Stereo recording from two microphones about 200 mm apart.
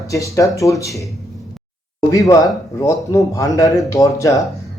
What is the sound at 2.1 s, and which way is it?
A man's voice, 15° left (ahead or behind).